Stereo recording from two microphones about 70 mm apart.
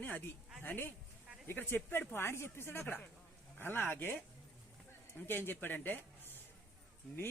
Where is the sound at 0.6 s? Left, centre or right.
Left.